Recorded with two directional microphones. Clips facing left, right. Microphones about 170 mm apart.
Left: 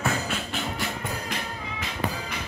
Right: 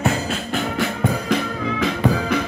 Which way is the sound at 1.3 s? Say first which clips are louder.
Right 12 dB; 90° right.